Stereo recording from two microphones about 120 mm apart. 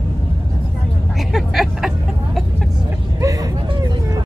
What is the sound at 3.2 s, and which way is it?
Vehicle, 30° right (ahead or behind).